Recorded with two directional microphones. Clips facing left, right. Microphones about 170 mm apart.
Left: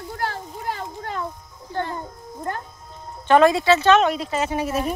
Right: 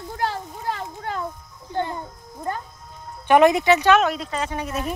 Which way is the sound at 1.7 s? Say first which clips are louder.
Right 1 dB; 15° right (ahead or behind).